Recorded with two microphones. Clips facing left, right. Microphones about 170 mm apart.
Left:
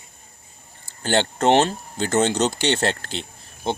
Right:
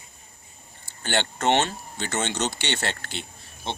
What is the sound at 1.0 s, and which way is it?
Speech, 35° left (ahead or behind).